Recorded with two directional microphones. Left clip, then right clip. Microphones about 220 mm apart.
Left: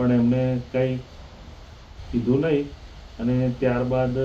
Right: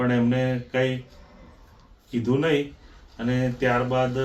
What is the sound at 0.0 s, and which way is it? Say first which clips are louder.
Mantra: left 1 dB; 35° right (ahead or behind).